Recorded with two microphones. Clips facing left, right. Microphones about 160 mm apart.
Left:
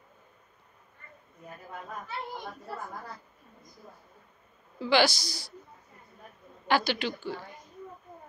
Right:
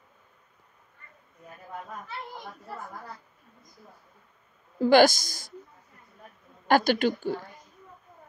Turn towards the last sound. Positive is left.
turn(degrees=-45)  # may be behind; listen again after turning